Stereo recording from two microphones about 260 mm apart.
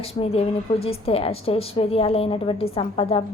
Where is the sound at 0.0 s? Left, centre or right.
Left.